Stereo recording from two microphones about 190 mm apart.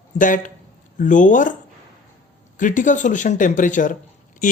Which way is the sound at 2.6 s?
45° left (ahead or behind).